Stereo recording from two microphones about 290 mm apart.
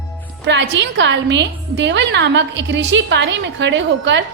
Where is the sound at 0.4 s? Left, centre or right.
Right.